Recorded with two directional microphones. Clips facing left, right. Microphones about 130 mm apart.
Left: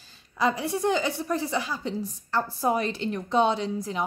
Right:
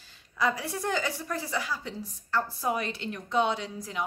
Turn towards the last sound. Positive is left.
turn(degrees=30)  # may be behind; listen again after turning